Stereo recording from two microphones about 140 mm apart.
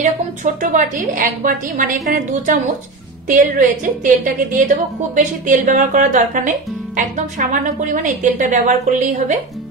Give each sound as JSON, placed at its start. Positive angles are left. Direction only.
{"t": 0.0, "sound": "a woman's voice", "side_deg": -65}